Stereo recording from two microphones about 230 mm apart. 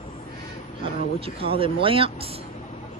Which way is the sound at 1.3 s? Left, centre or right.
Right.